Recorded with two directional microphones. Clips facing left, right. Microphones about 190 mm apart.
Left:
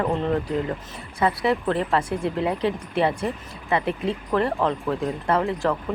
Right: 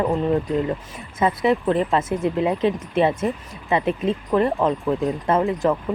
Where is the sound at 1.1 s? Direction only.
20° right (ahead or behind).